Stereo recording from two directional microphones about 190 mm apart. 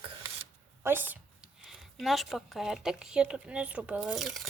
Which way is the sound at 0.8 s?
10° right (ahead or behind).